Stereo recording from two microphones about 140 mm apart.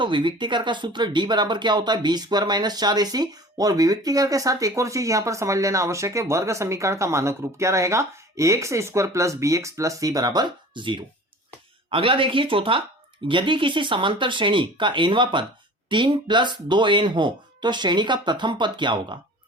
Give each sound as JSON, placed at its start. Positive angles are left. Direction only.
{"t": 0.0, "sound": "speech", "side_deg": -35}